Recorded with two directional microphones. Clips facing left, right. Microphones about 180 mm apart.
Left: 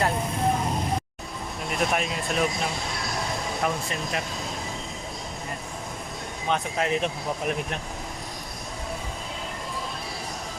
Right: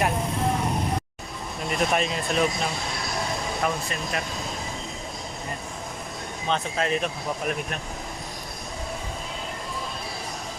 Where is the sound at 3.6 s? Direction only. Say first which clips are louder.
Even; 15° left (ahead or behind).